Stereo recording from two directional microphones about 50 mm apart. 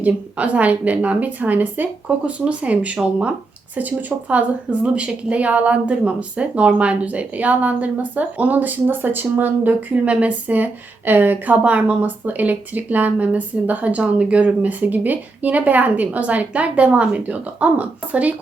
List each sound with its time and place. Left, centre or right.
0.0 s a woman's voice: right
3.8 s a woman's voice: right
9.9 s a woman's voice: right